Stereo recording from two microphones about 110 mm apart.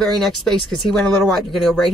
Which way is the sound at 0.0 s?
Centre (ahead or behind).